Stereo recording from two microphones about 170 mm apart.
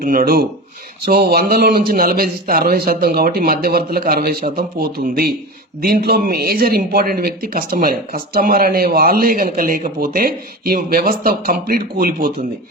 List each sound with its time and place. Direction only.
0.0 s speech: 55° right (ahead or behind)